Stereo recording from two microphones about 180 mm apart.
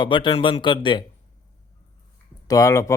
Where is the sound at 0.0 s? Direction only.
25° left (ahead or behind).